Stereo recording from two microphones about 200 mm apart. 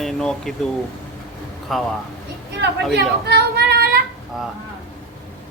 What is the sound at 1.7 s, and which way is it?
Speech, centre (ahead or behind).